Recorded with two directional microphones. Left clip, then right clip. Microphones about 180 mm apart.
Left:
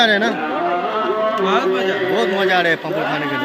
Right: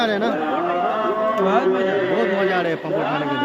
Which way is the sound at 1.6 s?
40° right (ahead or behind).